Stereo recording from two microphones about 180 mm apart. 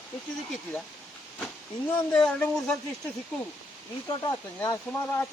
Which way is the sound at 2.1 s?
5° left (ahead or behind).